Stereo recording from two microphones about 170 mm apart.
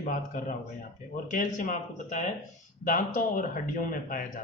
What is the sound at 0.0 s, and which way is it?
A man's voice, 50° left (ahead or behind).